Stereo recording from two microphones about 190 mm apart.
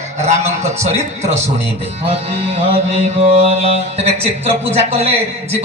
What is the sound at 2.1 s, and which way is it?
Speech, 30° right (ahead or behind).